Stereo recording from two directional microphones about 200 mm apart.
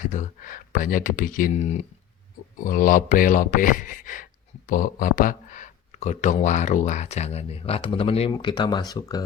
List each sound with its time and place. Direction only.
0.0 s speech: 40° left (ahead or behind); by 9.2 s 20° left (ahead or behind)